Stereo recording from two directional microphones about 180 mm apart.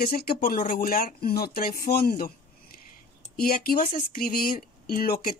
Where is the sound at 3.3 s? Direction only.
55° left (ahead or behind).